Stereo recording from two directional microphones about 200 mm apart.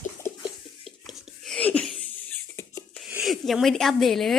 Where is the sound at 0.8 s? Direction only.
Centre (ahead or behind).